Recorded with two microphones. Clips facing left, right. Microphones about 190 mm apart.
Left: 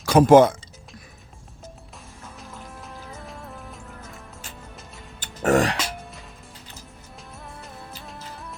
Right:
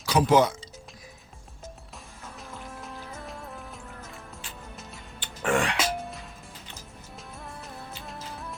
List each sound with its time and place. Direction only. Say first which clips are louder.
0.0 s speech: left 8 dB; 50° left (ahead or behind)
2.4 s music: right 1 dB; centre (ahead or behind)
5.2 s music: left 6 dB; 40° left (ahead or behind)
7.3 s music: even; centre (ahead or behind)